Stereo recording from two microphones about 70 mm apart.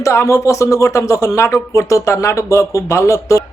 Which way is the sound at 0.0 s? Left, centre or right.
Left.